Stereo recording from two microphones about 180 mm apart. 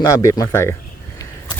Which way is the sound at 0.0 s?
15° left (ahead or behind).